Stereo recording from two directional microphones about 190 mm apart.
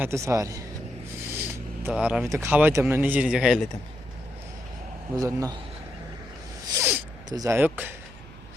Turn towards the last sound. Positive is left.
turn(degrees=-10)  # may be behind; listen again after turning